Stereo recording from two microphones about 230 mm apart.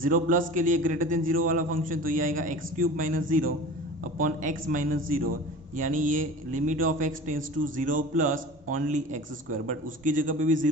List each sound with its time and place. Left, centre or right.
0.0 s a man's voice: right